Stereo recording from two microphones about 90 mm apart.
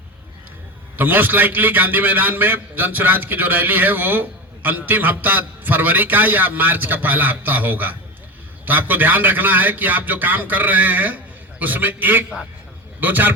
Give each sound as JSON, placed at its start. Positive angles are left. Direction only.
{"t": 0.9, "sound": "a man's voice", "side_deg": -20}